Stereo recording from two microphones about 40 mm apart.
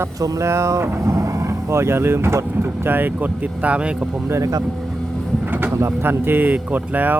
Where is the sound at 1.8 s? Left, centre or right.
Right.